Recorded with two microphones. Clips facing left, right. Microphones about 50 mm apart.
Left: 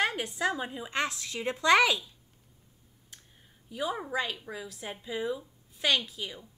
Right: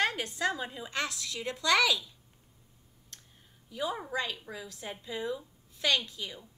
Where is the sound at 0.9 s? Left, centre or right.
Left.